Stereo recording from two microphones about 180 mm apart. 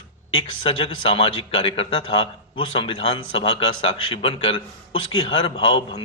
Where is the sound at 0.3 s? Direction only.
30° left (ahead or behind).